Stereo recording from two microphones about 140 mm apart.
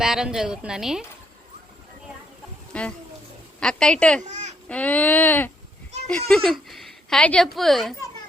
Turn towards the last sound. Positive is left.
turn(degrees=0)  # may be behind; listen again after turning